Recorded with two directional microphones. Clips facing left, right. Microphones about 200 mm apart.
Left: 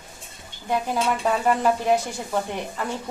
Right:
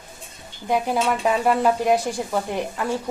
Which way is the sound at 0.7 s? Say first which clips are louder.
Right 2 dB; 10° right (ahead or behind).